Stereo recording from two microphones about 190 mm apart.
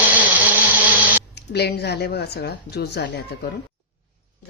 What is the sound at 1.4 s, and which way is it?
A woman's voice, 60° left (ahead or behind).